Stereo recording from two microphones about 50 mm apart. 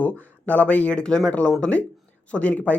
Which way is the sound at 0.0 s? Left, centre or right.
Left.